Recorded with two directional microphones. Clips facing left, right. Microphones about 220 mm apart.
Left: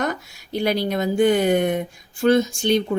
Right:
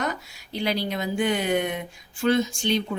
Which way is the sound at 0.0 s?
45° left (ahead or behind).